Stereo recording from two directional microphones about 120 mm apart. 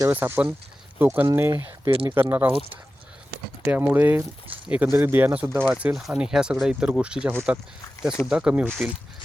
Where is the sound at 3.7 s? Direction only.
15° right (ahead or behind).